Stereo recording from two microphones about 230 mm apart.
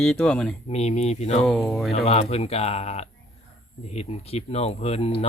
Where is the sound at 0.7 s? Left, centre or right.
Left.